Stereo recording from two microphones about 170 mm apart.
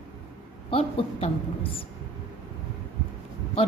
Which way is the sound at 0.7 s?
35° left (ahead or behind).